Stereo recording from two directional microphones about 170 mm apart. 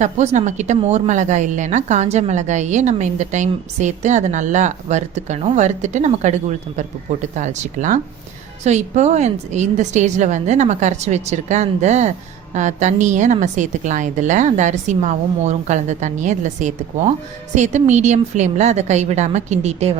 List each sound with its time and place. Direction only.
0.0 s a woman's voice: 45° right (ahead or behind)